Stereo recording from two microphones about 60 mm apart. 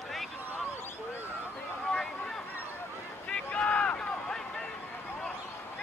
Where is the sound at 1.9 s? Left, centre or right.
Centre.